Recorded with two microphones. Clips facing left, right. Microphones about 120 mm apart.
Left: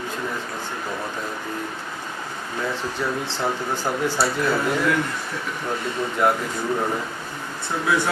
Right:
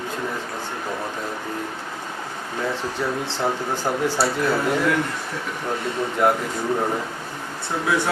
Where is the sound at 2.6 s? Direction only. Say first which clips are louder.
Right 1 dB; 30° right (ahead or behind).